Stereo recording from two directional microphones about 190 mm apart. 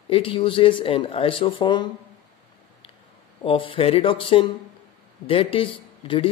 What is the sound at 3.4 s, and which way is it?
A man's voice, 25° left (ahead or behind).